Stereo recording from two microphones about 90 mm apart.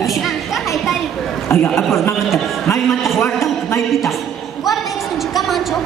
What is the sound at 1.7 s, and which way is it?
Speech, 30° left (ahead or behind).